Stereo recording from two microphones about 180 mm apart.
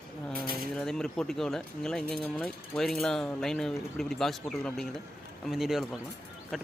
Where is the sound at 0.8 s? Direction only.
5° left (ahead or behind).